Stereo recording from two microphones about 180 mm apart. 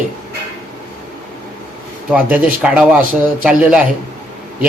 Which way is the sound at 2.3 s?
5° right (ahead or behind).